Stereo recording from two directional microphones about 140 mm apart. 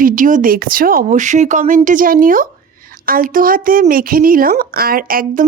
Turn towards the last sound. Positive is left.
turn(degrees=-90)